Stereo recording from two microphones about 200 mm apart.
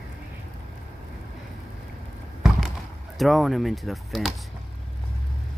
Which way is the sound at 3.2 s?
Centre (ahead or behind).